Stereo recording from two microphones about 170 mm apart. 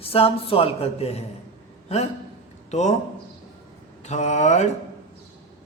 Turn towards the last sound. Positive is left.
turn(degrees=45)  # may be behind; listen again after turning